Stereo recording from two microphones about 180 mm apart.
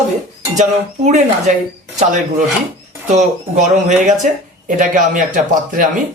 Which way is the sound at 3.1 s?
40° right (ahead or behind).